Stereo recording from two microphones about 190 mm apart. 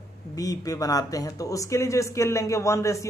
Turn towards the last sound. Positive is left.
turn(degrees=15)  # may be behind; listen again after turning